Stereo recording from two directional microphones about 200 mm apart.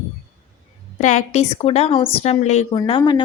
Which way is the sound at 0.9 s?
35° left (ahead or behind).